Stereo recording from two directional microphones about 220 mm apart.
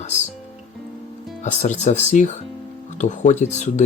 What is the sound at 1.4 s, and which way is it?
Speech, 35° left (ahead or behind).